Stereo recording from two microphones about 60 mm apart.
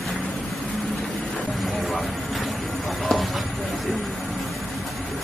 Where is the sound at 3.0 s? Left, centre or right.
Centre.